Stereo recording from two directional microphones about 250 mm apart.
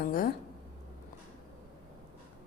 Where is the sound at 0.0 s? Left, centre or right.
Left.